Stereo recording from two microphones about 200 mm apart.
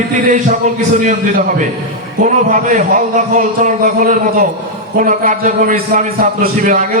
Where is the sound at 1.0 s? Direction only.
40° right (ahead or behind).